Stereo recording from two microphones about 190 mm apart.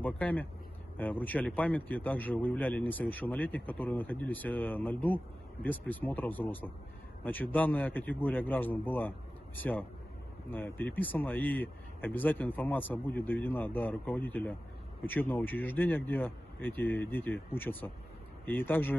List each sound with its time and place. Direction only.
0.0 s speech: 10° left (ahead or behind)